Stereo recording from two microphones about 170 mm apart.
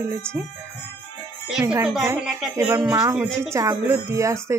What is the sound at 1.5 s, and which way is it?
Speech, 5° right (ahead or behind).